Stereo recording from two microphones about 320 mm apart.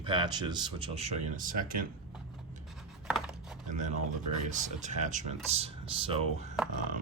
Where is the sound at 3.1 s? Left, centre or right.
Centre.